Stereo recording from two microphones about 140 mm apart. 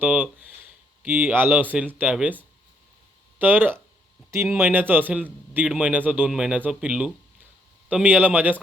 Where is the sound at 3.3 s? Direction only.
15° right (ahead or behind).